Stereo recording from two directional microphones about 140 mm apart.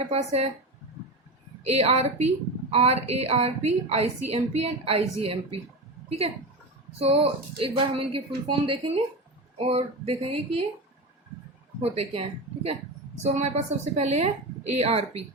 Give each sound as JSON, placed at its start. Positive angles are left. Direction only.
{"t": 0.0, "sound": "a woman's voice", "side_deg": -50}
{"t": 1.6, "sound": "a woman's voice", "side_deg": -50}
{"t": 11.8, "sound": "a woman's voice", "side_deg": -45}
{"t": 13.2, "sound": "a woman's voice", "side_deg": -55}